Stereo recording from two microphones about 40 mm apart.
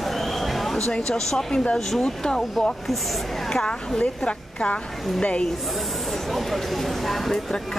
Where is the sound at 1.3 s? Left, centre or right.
Centre.